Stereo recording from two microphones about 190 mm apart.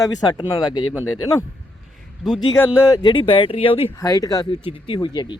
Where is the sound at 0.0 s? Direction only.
20° left (ahead or behind).